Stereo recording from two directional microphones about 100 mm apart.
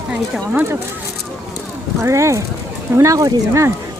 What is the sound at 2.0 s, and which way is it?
Speech, 30° right (ahead or behind).